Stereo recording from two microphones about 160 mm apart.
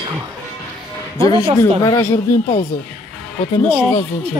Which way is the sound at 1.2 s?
25° left (ahead or behind).